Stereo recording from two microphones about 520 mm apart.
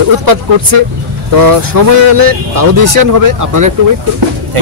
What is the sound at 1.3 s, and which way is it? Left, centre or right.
Speech, right.